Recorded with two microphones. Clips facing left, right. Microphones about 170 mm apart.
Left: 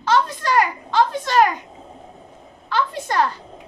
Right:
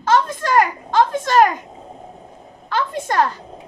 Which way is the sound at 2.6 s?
45° right (ahead or behind).